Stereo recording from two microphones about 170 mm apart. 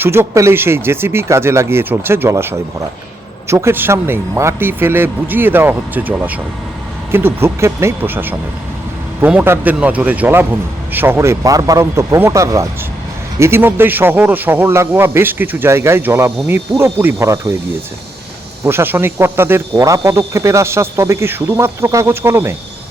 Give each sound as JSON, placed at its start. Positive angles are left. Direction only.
{"t": 0.0, "sound": "speech", "side_deg": -15}
{"t": 18.6, "sound": "speech", "side_deg": -15}